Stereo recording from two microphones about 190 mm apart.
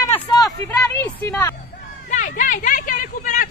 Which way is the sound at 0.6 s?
15° left (ahead or behind).